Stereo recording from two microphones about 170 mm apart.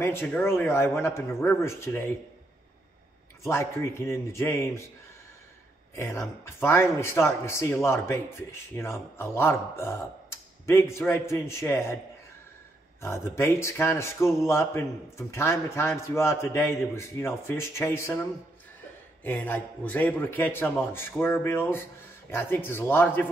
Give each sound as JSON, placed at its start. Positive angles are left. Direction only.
{"t": 0.0, "sound": "speech", "side_deg": 15}
{"t": 3.4, "sound": "speech", "side_deg": 15}
{"t": 5.9, "sound": "speech", "side_deg": 15}
{"t": 13.0, "sound": "speech", "side_deg": 15}
{"t": 19.2, "sound": "speech", "side_deg": 10}